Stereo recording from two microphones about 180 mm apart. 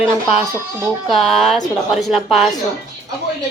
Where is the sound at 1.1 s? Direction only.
Centre (ahead or behind).